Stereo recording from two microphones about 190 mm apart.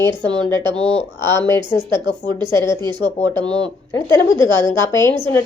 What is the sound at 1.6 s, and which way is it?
Speech, 25° right (ahead or behind).